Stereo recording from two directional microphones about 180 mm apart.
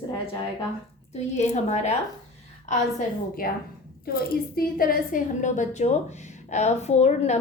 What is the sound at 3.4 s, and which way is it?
A woman's voice, 55° left (ahead or behind).